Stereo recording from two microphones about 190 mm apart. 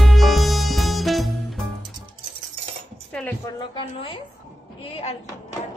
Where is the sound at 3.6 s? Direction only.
30° left (ahead or behind).